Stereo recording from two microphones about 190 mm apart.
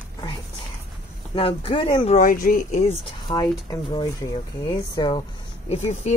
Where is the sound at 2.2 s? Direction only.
45° left (ahead or behind).